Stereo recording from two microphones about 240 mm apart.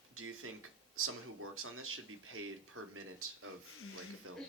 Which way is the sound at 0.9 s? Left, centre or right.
Right.